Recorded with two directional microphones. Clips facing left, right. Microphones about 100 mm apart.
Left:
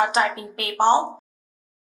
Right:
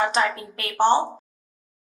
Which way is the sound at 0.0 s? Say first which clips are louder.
Left 1 dB; 30° left (ahead or behind).